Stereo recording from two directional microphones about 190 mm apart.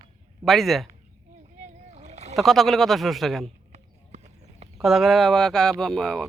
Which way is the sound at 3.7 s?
35° right (ahead or behind).